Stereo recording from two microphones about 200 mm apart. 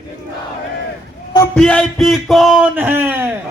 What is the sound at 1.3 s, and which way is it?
Speech, 10° left (ahead or behind).